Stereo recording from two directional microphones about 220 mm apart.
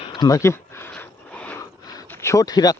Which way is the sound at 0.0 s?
20° left (ahead or behind).